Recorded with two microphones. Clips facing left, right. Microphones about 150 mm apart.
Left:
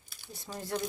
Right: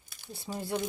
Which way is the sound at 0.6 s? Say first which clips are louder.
Right 2 dB; 20° right (ahead or behind).